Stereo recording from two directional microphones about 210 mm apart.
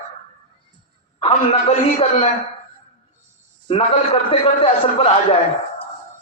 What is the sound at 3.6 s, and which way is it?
A man's voice, 25° left (ahead or behind).